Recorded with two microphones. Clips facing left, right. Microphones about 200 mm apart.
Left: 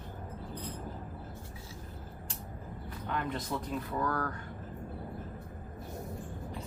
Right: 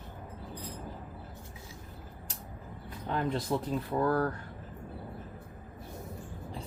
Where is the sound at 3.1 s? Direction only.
30° right (ahead or behind).